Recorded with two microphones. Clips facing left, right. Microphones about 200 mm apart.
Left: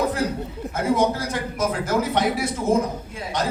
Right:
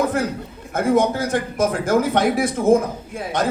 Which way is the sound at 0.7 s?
50° right (ahead or behind).